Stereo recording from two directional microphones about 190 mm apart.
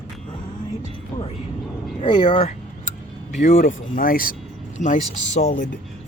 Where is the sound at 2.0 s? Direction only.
25° left (ahead or behind).